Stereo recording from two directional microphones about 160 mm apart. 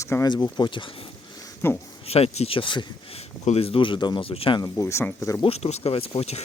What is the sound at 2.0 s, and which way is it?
Speech, 40° left (ahead or behind).